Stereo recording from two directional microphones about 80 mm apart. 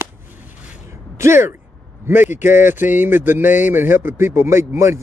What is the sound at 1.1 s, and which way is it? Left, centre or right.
A man's voice, right.